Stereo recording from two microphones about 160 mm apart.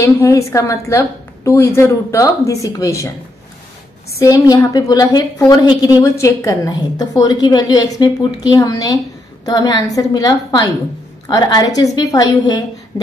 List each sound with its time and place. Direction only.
0.0 s a woman's voice: 20° left (ahead or behind)
4.2 s a woman's voice: 20° left (ahead or behind)